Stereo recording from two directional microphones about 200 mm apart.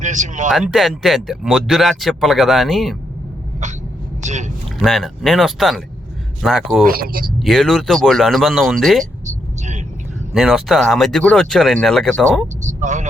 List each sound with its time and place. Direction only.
0.0 s speech: 40° right (ahead or behind)
0.5 s speech: centre (ahead or behind)
4.2 s speech: 35° right (ahead or behind)
4.8 s speech: centre (ahead or behind)
6.8 s speech: 45° right (ahead or behind)
7.3 s speech: centre (ahead or behind)
10.3 s speech: centre (ahead or behind)
12.6 s speech: 40° right (ahead or behind)